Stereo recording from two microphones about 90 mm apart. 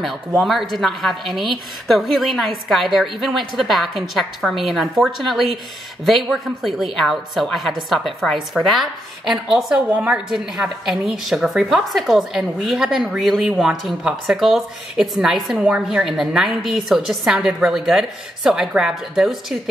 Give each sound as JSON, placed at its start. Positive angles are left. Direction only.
{"t": 0.4, "sound": "a woman's voice", "side_deg": 0}
{"t": 9.8, "sound": "a woman's voice", "side_deg": -15}
{"t": 10.3, "sound": "a woman's voice", "side_deg": -5}